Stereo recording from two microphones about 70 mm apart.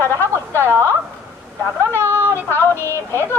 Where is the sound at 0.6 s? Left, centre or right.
Right.